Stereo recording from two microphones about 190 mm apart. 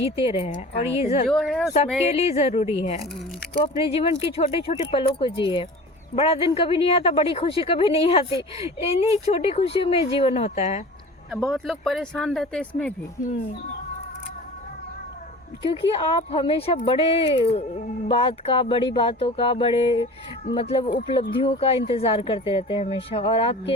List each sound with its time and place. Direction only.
0.0 s speech: 30° left (ahead or behind)
1.3 s speech: centre (ahead or behind)
2.0 s speech: 35° left (ahead or behind)
11.3 s speech: centre (ahead or behind)
15.6 s speech: 30° left (ahead or behind)